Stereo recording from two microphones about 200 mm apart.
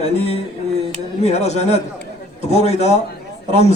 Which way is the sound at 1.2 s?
35° left (ahead or behind).